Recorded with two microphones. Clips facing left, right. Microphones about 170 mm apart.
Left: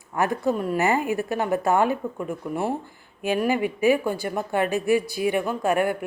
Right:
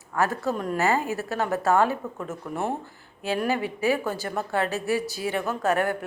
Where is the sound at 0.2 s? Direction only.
15° left (ahead or behind).